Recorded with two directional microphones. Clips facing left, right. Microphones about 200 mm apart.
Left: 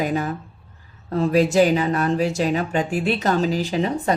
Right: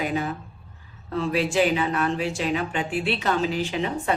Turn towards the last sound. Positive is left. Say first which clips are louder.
# left 4 dB
turn(degrees=35)  # may be behind; listen again after turning